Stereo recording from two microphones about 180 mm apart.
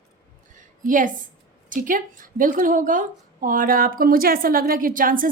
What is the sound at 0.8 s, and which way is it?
A woman's voice, 45° right (ahead or behind).